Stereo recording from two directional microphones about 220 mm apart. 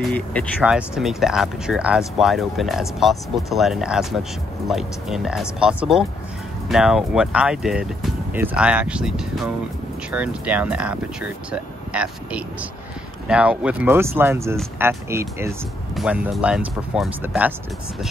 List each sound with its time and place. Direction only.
0.0 s speech: 5° left (ahead or behind)